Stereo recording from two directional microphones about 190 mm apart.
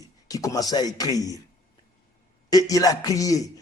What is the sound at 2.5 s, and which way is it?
A man's voice, 20° left (ahead or behind).